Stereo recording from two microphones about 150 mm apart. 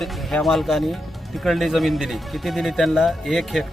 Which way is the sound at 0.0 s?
Centre (ahead or behind).